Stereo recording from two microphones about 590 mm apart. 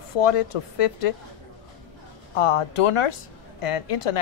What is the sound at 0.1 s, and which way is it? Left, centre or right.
A woman's voice, left.